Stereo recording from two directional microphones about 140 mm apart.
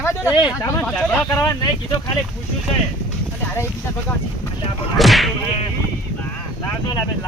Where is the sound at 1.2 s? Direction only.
25° left (ahead or behind).